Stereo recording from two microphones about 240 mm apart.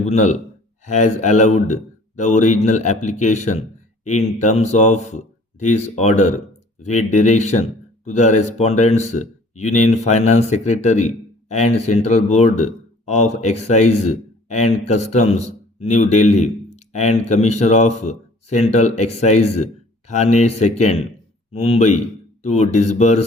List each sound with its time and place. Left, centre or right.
0.0 s speech: left